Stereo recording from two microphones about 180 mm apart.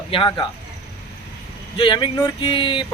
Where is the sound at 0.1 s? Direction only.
25° left (ahead or behind).